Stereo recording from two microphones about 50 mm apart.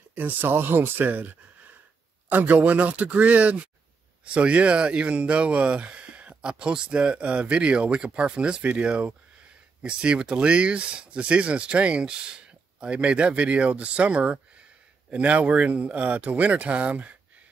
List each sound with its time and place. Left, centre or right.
0.1 s speech: right